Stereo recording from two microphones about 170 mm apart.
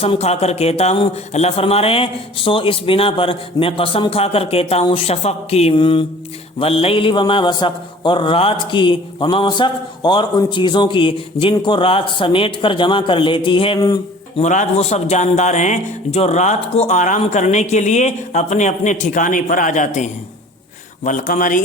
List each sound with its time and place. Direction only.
0.0 s a man's voice: 35° left (ahead or behind)
14.3 s a man's voice: 45° left (ahead or behind)